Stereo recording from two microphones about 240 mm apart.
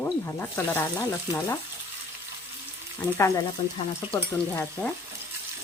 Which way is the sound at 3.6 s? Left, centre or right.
Left.